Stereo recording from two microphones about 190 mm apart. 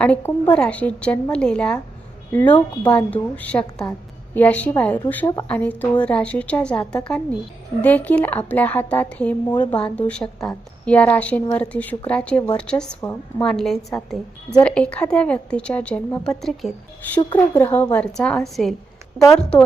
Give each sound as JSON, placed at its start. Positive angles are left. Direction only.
{"t": 0.0, "sound": "a woman's voice", "side_deg": 10}
{"t": 5.2, "sound": "speech", "side_deg": 20}
{"t": 5.5, "sound": "a woman's voice", "side_deg": 10}